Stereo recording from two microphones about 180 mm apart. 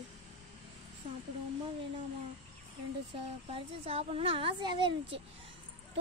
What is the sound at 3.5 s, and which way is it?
Speech, 35° right (ahead or behind).